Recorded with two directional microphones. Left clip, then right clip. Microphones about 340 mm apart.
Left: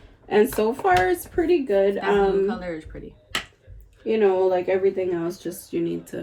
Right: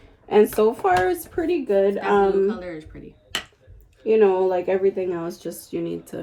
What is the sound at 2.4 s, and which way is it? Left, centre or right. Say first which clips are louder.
Speech: right 1 dB; centre.